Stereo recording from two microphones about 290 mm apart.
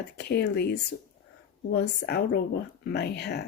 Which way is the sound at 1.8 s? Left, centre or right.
Left.